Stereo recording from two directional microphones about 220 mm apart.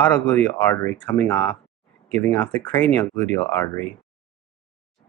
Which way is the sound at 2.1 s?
30° right (ahead or behind).